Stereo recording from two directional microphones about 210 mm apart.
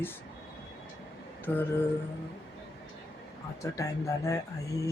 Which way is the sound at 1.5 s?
10° left (ahead or behind).